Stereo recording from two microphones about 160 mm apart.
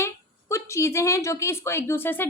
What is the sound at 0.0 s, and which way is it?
A woman's voice, 20° left (ahead or behind).